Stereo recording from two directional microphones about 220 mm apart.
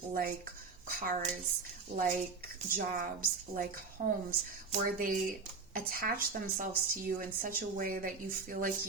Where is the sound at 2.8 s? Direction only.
40° right (ahead or behind).